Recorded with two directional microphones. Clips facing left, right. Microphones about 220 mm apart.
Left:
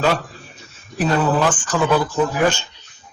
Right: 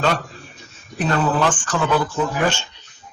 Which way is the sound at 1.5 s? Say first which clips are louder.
Left 2 dB; 10° left (ahead or behind).